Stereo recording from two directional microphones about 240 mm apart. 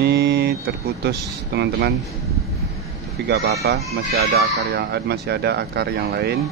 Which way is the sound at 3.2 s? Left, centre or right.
Right.